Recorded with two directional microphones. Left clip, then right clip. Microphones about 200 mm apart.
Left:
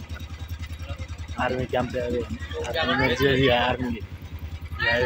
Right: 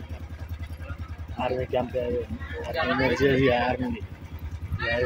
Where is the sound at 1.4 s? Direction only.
5° left (ahead or behind).